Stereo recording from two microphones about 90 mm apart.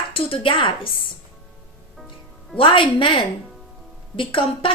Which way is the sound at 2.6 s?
80° left.